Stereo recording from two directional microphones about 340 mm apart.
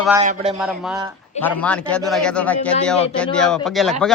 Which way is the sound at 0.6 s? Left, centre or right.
Centre.